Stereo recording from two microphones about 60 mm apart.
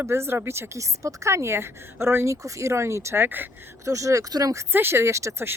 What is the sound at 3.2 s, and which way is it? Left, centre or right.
Speech, right.